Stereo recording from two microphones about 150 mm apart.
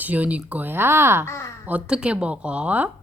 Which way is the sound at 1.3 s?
20° left (ahead or behind).